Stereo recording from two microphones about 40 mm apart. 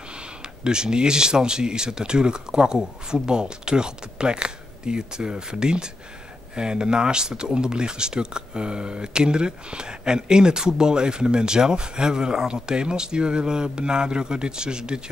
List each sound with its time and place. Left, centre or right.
0.7 s speech: centre